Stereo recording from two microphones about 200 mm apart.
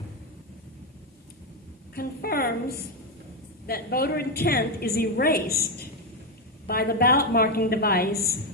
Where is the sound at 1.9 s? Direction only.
50° left (ahead or behind).